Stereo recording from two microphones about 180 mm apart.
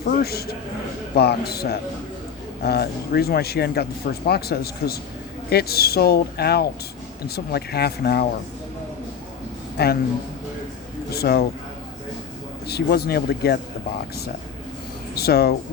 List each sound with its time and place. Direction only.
0.0 s speech: 60° left (ahead or behind)
2.6 s speech: 60° left (ahead or behind)
9.7 s speech: 60° left (ahead or behind)
11.1 s speech: 60° left (ahead or behind)
12.6 s speech: 60° left (ahead or behind)
15.1 s speech: 60° left (ahead or behind)